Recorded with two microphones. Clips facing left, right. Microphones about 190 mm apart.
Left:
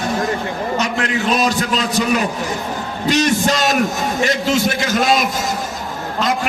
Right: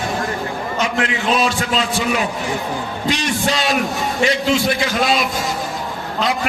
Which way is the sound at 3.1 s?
45° left (ahead or behind).